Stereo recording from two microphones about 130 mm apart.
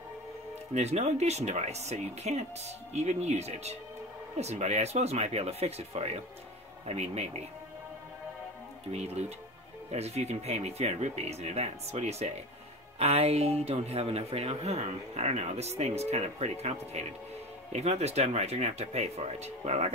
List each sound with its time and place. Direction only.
0.7 s speech: 60° right (ahead or behind)
8.9 s speech: 55° right (ahead or behind)